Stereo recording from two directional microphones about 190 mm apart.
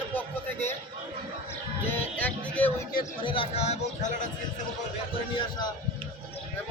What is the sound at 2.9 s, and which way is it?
Speech, 25° left (ahead or behind).